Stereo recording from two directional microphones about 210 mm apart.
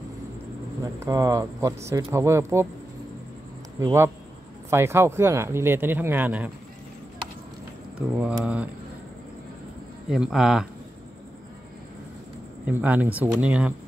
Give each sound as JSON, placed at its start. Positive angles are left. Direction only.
{"t": 0.9, "sound": "speech", "side_deg": -15}
{"t": 3.8, "sound": "speech", "side_deg": -10}
{"t": 8.2, "sound": "speech", "side_deg": -5}
{"t": 10.0, "sound": "speech", "side_deg": 0}
{"t": 12.6, "sound": "speech", "side_deg": -10}